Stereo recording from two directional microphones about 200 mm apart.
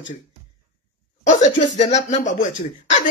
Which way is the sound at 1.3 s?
35° left (ahead or behind).